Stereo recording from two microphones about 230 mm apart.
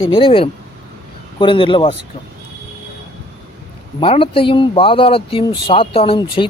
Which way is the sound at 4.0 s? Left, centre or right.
Left.